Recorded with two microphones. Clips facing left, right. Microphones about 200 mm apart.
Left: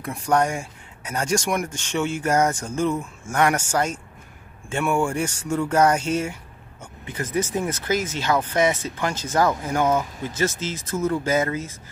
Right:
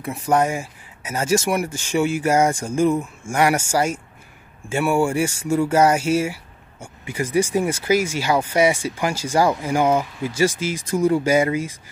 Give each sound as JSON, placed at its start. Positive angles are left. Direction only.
{"t": 0.0, "sound": "speech", "side_deg": -5}